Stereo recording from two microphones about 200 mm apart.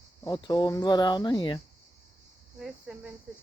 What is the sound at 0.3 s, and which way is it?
Speech, 20° left (ahead or behind).